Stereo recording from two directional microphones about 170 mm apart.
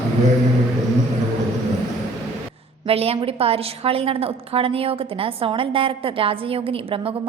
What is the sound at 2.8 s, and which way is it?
A woman's voice, 35° right (ahead or behind).